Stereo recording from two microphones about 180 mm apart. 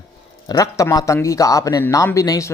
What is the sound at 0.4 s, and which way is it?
A man's voice, 20° left (ahead or behind).